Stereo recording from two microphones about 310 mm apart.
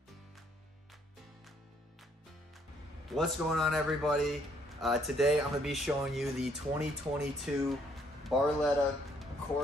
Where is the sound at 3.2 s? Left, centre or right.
Centre.